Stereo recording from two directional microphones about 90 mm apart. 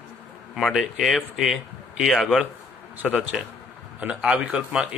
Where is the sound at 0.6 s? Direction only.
Centre (ahead or behind).